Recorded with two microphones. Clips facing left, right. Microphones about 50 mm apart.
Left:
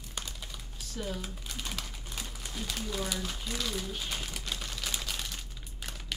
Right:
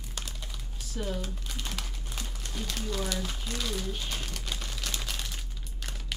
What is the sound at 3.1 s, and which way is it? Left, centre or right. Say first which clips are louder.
Speech: right 1 dB; centre.